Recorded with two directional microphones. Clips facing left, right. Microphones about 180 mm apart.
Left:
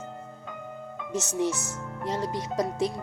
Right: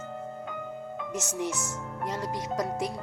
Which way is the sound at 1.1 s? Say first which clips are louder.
Left 5 dB; 25° left (ahead or behind).